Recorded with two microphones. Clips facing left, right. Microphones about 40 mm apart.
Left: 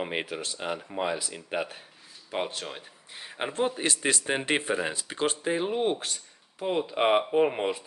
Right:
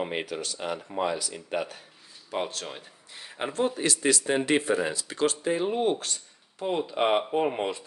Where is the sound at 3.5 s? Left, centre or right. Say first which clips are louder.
Right 1 dB; left.